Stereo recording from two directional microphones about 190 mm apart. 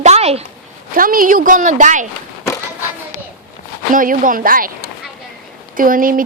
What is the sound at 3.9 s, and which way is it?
Speech, 45° right (ahead or behind).